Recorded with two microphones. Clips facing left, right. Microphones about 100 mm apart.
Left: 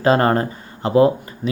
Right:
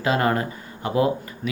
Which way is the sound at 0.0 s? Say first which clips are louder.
Left 6 dB; 40° left (ahead or behind).